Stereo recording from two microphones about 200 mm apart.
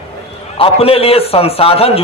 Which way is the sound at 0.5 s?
30° left (ahead or behind).